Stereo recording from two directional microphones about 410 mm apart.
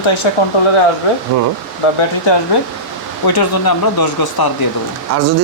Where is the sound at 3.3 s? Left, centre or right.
Left.